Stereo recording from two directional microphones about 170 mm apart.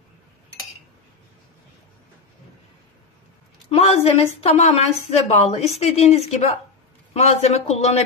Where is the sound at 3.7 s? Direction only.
35° left (ahead or behind).